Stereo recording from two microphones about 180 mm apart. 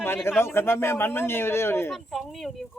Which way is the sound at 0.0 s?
10° left (ahead or behind).